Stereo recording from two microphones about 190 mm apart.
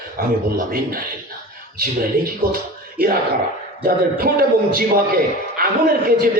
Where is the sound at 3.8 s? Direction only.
50° right (ahead or behind).